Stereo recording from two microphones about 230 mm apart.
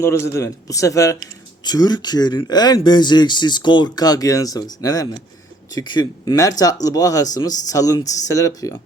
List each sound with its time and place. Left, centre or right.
0.0 s speech: centre